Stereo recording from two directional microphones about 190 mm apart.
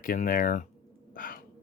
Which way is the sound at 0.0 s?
45° left (ahead or behind).